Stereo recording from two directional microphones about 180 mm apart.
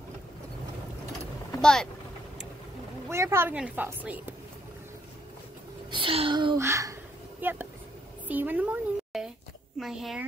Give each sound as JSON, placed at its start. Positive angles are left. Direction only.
{"t": 1.6, "sound": "speech", "side_deg": 5}
{"t": 3.1, "sound": "a woman's voice", "side_deg": -15}
{"t": 5.9, "sound": "a child's voice", "side_deg": -30}
{"t": 6.6, "sound": "a sound", "side_deg": -15}
{"t": 8.3, "sound": "a woman's voice", "side_deg": -10}